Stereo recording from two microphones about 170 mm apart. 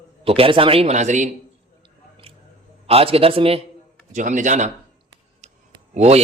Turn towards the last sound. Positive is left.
turn(degrees=-40)  # may be behind; listen again after turning